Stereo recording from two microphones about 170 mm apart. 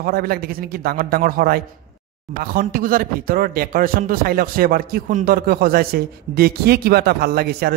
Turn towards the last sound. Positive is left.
turn(degrees=-70)  # may be behind; listen again after turning